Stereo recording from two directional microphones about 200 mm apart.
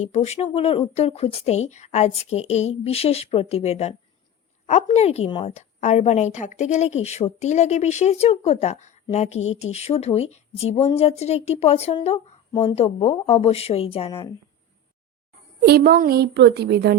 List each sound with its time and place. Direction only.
0.0 s a woman's voice: 35° left (ahead or behind)
15.6 s a woman's voice: 50° right (ahead or behind)